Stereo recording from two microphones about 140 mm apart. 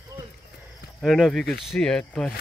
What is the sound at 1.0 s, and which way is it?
Speech, centre (ahead or behind).